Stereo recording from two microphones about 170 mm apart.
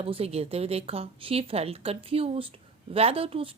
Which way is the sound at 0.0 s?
35° right (ahead or behind).